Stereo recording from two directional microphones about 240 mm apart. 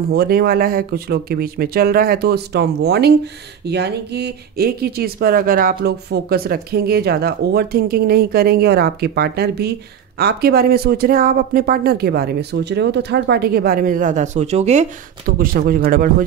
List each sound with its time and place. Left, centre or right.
0.1 s speech: right